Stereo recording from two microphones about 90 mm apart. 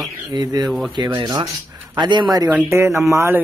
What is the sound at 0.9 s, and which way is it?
Speech, 55° right (ahead or behind).